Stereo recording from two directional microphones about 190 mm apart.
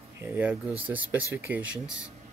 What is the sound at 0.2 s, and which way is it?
Speech, 10° right (ahead or behind).